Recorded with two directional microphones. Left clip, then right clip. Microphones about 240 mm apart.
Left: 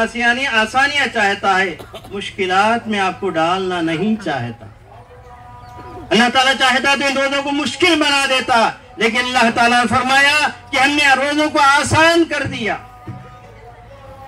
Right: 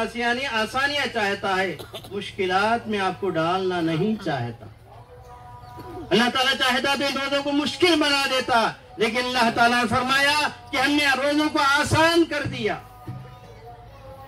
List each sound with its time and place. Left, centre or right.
0.0 s a man's voice: left
6.0 s a man's voice: left